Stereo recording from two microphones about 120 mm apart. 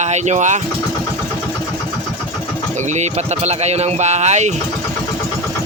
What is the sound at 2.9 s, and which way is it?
Speech, 70° right (ahead or behind).